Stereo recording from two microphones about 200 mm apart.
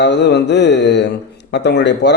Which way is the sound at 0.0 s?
60° left (ahead or behind).